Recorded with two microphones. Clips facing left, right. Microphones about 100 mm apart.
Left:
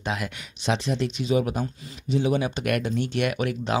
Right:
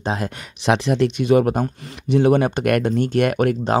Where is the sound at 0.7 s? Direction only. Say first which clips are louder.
Right 8 dB; 70° right (ahead or behind).